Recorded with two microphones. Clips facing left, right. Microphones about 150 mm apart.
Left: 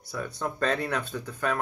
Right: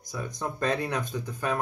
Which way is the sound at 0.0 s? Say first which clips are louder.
Left 1 dB; 15° right (ahead or behind).